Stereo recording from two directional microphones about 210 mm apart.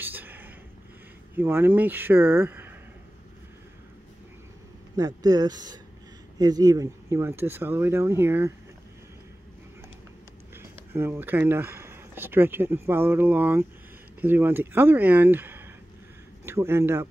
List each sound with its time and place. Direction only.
0.0 s a sound: 10° right (ahead or behind)
1.3 s speech: 10° right (ahead or behind)
4.9 s speech: 15° right (ahead or behind)
10.5 s speech: 10° right (ahead or behind)